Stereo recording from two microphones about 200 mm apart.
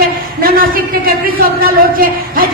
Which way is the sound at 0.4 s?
45° right (ahead or behind).